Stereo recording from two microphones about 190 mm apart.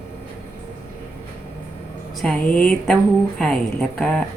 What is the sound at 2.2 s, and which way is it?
Speech, 5° left (ahead or behind).